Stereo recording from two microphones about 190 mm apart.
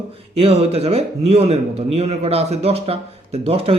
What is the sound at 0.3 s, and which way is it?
A man's voice, 30° right (ahead or behind).